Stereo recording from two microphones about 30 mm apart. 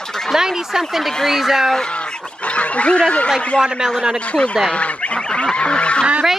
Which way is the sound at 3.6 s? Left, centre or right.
Right.